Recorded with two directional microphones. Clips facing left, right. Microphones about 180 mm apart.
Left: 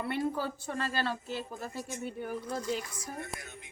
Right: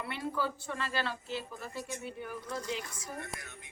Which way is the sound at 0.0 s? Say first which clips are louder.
Left 3 dB; 45° left (ahead or behind).